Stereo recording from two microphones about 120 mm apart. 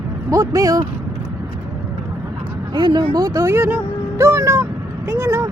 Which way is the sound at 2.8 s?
40° right (ahead or behind).